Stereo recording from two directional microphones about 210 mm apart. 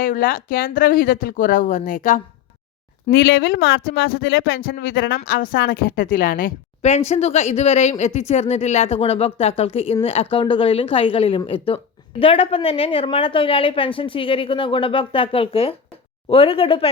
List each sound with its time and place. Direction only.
0.0 s speech: 40° left (ahead or behind)
3.1 s speech: 55° left (ahead or behind); by 16.9 s 25° left (ahead or behind)